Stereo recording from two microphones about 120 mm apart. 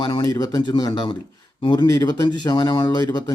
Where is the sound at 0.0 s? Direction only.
35° left (ahead or behind).